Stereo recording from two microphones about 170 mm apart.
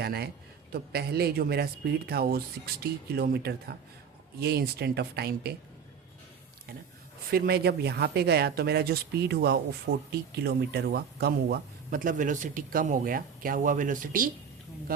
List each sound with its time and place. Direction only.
0.0 s a man's voice: 70° right (ahead or behind)
7.3 s speech: 65° right (ahead or behind)